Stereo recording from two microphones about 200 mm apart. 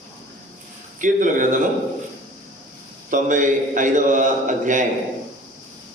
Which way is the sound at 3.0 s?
40° right (ahead or behind).